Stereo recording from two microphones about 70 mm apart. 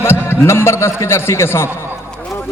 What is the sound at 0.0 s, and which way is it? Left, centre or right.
A man's voice, left.